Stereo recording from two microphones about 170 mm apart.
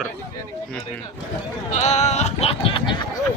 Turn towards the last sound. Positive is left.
turn(degrees=30)  # may be behind; listen again after turning